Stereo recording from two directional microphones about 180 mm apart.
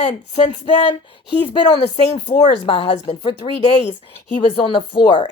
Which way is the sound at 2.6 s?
30° left (ahead or behind).